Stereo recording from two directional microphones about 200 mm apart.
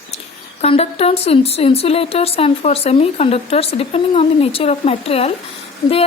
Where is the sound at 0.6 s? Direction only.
30° left (ahead or behind).